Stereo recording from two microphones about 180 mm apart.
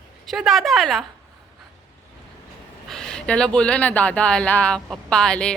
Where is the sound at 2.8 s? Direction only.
5° left (ahead or behind).